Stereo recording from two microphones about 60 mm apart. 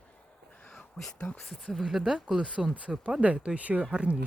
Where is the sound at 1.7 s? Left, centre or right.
Centre.